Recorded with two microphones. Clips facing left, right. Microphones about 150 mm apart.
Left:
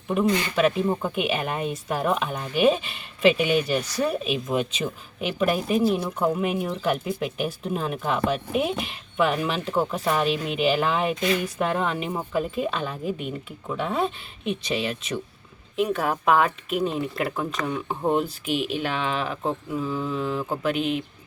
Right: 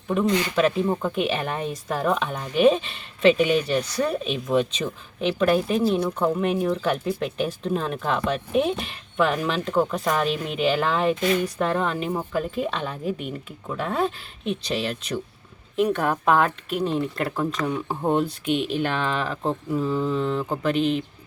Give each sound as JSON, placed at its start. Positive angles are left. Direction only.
{"t": 0.1, "sound": "speech", "side_deg": 10}
{"t": 11.2, "sound": "speech", "side_deg": -40}
{"t": 11.6, "sound": "speech", "side_deg": 5}